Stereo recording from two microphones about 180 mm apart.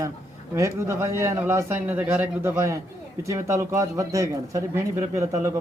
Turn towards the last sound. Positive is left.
turn(degrees=-15)  # may be behind; listen again after turning